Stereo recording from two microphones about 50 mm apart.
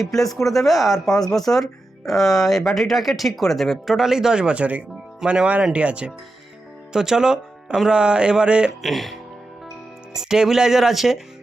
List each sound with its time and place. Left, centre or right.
0.0 s speech: centre; by 5.6 s right
5.7 s a sound: right
6.9 s speech: centre
7.9 s a sound: centre
8.8 s speech: centre
10.1 s speech: centre